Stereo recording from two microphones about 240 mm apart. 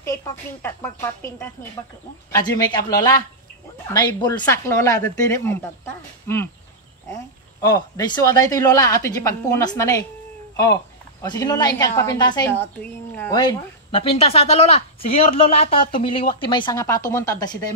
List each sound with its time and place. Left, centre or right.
0.0 s speech: centre
7.6 s speech: centre